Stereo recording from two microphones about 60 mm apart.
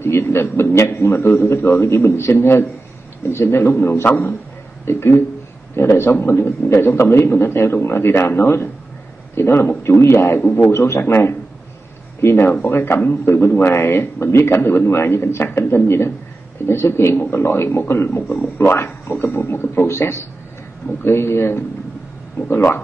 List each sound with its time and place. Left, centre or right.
0.0 s a man's voice: left
10.7 s speech: left
12.4 s speech: left
19.9 s a man's voice: left